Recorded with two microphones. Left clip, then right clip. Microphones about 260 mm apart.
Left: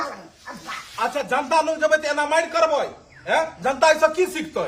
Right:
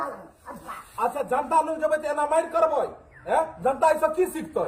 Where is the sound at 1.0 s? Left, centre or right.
Left.